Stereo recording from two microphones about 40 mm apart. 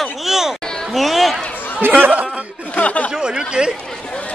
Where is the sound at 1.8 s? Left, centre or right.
Right.